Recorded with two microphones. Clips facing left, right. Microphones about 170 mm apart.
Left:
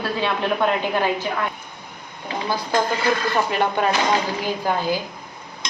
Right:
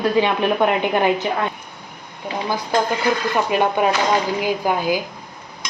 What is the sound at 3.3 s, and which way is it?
A woman's voice, 15° right (ahead or behind).